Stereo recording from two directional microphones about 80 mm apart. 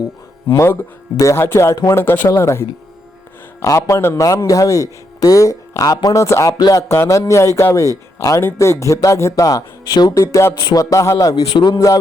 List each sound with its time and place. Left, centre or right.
0.4 s speech: left
6.2 s speech: left
6.6 s speech: left
6.8 s speech: left
11.5 s a man's voice: left